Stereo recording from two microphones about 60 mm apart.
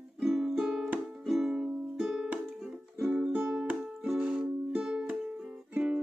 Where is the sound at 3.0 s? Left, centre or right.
Centre.